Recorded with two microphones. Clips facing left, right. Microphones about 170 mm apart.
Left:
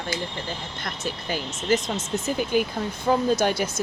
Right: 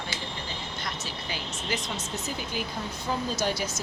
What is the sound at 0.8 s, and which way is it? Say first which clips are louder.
Speech: left 4 dB; 50° left (ahead or behind).